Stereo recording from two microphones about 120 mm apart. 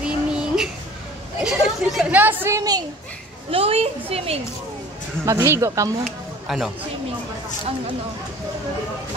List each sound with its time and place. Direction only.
0.0 s a sound: 5° right (ahead or behind)
1.4 s speech: 5° right (ahead or behind)
2.5 s a child's voice: 30° right (ahead or behind)
3.4 s a woman's voice: 55° right (ahead or behind)
5.2 s speech: 25° right (ahead or behind)
6.4 s a man's voice: centre (ahead or behind)